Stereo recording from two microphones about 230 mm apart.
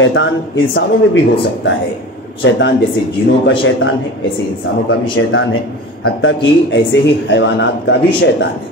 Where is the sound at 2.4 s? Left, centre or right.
Left.